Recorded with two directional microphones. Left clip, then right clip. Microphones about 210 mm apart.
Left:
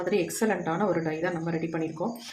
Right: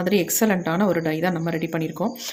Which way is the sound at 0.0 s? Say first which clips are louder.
Right 5 dB; 50° right (ahead or behind).